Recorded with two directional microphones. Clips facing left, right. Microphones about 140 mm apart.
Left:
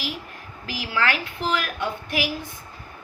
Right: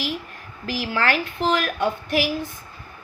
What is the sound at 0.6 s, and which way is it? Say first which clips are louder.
A woman's voice: right 2 dB; 45° right (ahead or behind).